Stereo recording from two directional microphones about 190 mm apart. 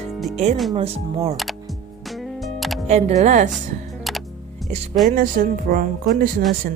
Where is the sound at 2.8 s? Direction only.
35° right (ahead or behind).